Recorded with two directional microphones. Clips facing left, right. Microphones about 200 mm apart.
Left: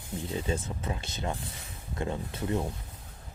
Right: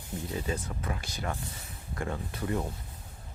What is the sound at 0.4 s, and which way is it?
Speech, 25° left (ahead or behind).